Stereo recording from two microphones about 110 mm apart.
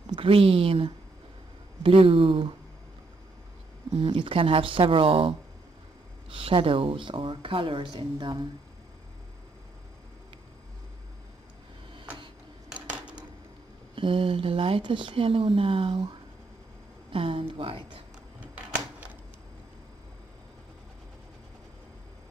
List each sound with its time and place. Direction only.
0.1 s a woman's voice: 55° right (ahead or behind)
3.9 s speech: 50° right (ahead or behind)
6.3 s speech: 50° right (ahead or behind)
12.7 s a sound: 10° right (ahead or behind)
13.9 s speech: 50° right (ahead or behind)